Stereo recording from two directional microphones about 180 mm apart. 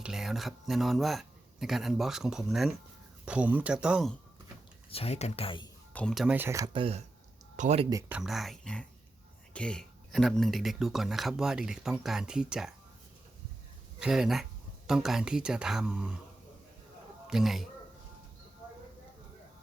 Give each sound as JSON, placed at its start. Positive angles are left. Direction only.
{"t": 0.0, "sound": "speech", "side_deg": 0}
{"t": 4.9, "sound": "speech", "side_deg": 35}
{"t": 5.9, "sound": "speech", "side_deg": 5}
{"t": 6.7, "sound": "speech", "side_deg": -30}
{"t": 8.1, "sound": "speech", "side_deg": 0}
{"t": 14.0, "sound": "speech", "side_deg": -5}
{"t": 17.2, "sound": "speech", "side_deg": 0}